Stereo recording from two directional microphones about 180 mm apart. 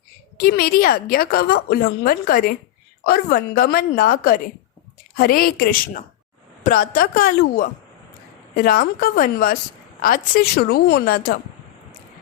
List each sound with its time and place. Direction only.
0.3 s a woman's voice: 55° left (ahead or behind)